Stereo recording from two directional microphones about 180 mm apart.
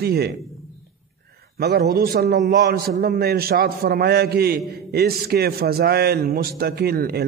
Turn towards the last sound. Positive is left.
turn(degrees=-60)  # may be behind; listen again after turning